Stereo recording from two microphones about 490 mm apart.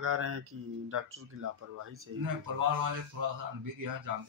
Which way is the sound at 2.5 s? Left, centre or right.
Right.